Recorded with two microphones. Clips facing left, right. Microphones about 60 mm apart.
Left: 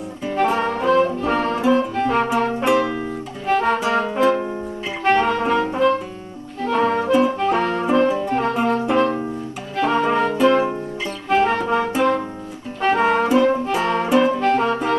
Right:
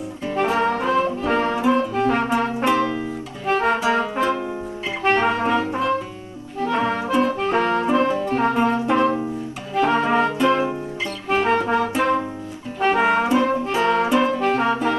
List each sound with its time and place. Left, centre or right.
0.4 s music: centre
3.4 s music: centre
5.0 s music: centre
7.3 s music: centre
7.8 s music: centre